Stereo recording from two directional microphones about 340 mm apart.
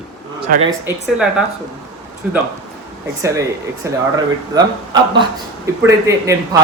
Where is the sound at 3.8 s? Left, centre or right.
Centre.